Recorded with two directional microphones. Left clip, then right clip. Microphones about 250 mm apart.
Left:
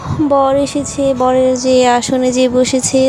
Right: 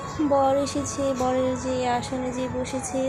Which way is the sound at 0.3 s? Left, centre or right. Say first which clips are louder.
Left 9 dB; left.